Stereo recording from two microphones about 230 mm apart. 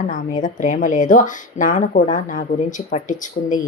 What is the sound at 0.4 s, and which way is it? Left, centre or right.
Speech, left.